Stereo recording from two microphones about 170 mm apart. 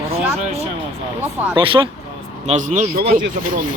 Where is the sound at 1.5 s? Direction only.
30° right (ahead or behind).